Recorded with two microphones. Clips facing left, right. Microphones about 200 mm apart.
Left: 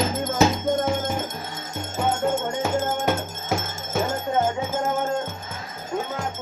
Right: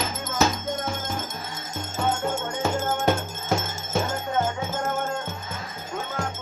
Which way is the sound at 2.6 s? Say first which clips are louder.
Right 2 dB; 10° left (ahead or behind).